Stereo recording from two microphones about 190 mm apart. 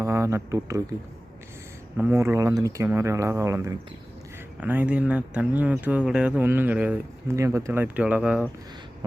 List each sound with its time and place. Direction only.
0.0 s speech: 15° right (ahead or behind)
2.0 s speech: 15° right (ahead or behind)